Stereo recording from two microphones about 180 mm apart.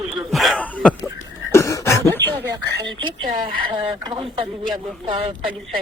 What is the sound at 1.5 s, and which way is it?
Throat clearing, 15° left (ahead or behind).